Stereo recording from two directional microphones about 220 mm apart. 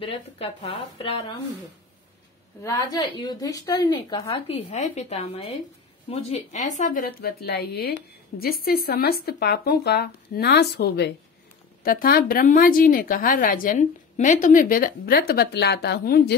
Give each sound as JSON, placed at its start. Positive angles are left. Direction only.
{"t": 0.0, "sound": "a woman's voice", "side_deg": 25}
{"t": 2.6, "sound": "a woman's voice", "side_deg": 15}